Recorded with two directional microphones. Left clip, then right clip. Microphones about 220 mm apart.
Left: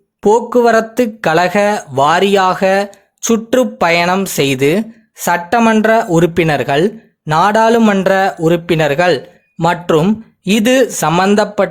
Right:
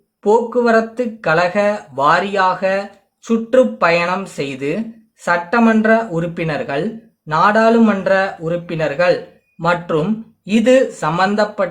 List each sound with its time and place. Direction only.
0.2 s speech: 45° left (ahead or behind)